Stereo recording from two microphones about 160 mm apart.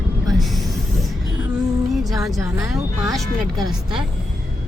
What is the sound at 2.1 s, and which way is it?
Speech, 20° right (ahead or behind).